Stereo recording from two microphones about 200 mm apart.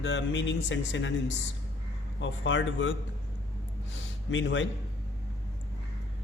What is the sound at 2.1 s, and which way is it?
Speech, 70° left (ahead or behind).